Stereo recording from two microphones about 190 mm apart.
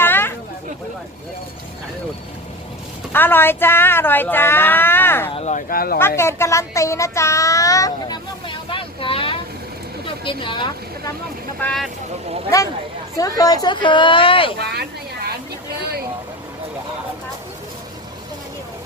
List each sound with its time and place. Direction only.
0.0 s a sound: 10° left (ahead or behind)
3.1 s a woman's voice: 10° left (ahead or behind)
5.3 s speech: 35° left (ahead or behind)
6.0 s a woman's voice: 15° left (ahead or behind)
11.6 s speech: centre (ahead or behind)
13.1 s a woman's voice: 20° left (ahead or behind)
14.6 s a sound: 60° right (ahead or behind)